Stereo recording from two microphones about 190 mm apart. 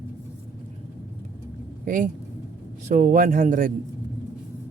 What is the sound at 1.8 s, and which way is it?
Speech, 45° right (ahead or behind).